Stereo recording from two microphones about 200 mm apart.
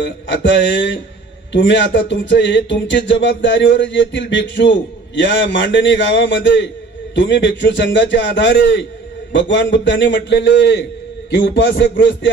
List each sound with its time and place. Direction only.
0.3 s speech: 65° left (ahead or behind)